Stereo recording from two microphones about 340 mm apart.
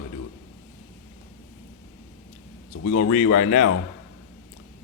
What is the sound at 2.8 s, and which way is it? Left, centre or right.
Speech, left.